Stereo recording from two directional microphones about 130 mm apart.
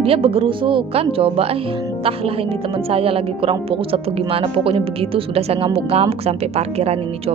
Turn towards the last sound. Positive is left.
turn(degrees=-55)  # may be behind; listen again after turning